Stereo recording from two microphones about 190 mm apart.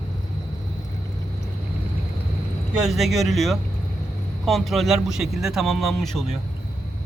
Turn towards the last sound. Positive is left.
turn(degrees=0)  # may be behind; listen again after turning